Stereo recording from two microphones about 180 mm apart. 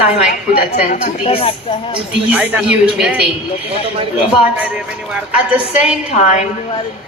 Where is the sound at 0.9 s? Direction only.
35° left (ahead or behind).